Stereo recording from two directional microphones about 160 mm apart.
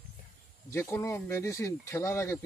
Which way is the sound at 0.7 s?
15° left (ahead or behind).